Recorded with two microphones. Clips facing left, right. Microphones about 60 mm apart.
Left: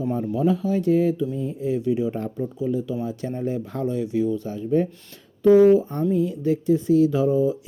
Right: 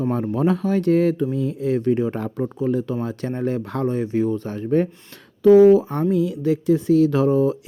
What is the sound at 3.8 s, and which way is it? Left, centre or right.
Speech, right.